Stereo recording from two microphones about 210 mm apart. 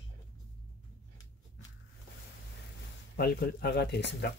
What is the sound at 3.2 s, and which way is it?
Speech, 50° left (ahead or behind).